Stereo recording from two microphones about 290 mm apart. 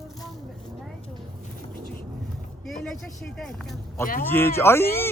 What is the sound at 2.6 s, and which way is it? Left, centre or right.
A man's voice, centre.